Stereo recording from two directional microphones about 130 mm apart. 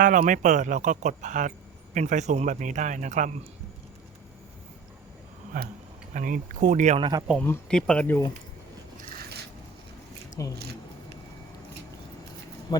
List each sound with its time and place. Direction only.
0.0 s speech: 90° right; by 3.3 s 65° right (ahead or behind)
5.5 s speech: 90° right; by 7.0 s 65° right (ahead or behind)
7.0 s speech: 30° right (ahead or behind)
7.7 s speech: 5° left (ahead or behind)
10.4 s speech: 25° left (ahead or behind)